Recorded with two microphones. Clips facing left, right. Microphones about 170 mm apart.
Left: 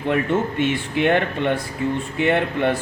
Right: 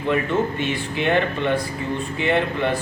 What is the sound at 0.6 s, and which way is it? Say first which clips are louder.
Speech: left 3 dB; 55° left (ahead or behind).